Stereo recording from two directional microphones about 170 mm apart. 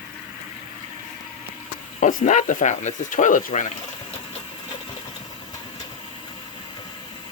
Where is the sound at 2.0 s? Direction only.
50° left (ahead or behind).